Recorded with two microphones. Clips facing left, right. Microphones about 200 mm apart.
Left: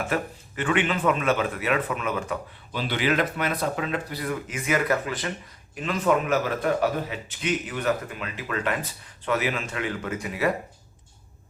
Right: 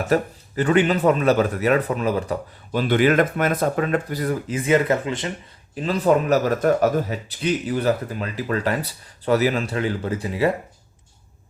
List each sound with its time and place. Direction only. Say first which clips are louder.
0.0 s a man's voice: right 7 dB; 40° right (ahead or behind)
2.8 s a man's voice: right 7 dB; 50° right (ahead or behind); by 10.5 s 30° right (ahead or behind)